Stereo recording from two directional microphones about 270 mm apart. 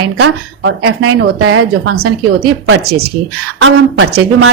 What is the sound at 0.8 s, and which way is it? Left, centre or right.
Speech, right.